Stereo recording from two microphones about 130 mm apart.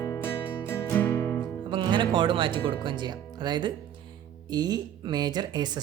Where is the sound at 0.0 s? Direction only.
20° left (ahead or behind).